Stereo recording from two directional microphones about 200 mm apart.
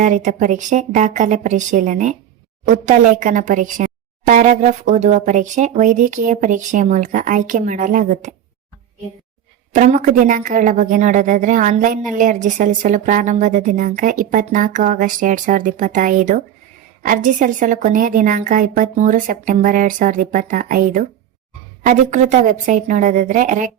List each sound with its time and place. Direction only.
0.0 s speech: 40° right (ahead or behind)
9.7 s speech: 40° right (ahead or behind)